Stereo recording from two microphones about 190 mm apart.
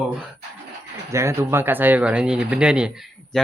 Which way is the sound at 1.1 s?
15° right (ahead or behind).